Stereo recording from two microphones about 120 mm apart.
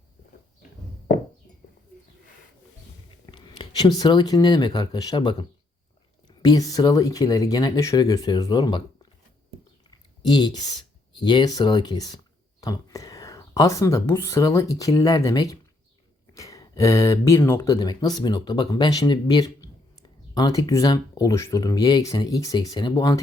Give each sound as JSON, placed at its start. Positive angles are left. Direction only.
{"t": 3.3, "sound": "speech", "side_deg": 40}
{"t": 9.9, "sound": "speech", "side_deg": 40}
{"t": 17.7, "sound": "speech", "side_deg": 35}